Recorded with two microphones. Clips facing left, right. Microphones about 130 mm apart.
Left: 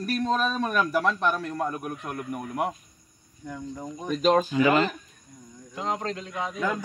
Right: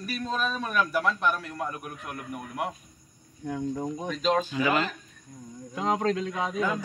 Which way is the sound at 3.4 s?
65° right (ahead or behind).